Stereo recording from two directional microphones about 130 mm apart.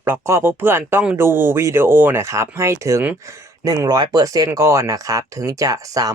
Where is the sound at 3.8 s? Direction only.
30° right (ahead or behind).